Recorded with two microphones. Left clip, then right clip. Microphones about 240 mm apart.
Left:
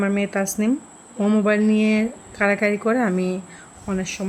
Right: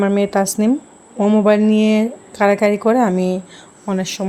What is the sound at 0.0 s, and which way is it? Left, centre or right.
Speech, centre.